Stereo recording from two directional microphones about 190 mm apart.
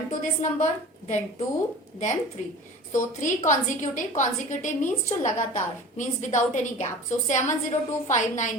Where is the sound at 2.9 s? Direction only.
40° left (ahead or behind).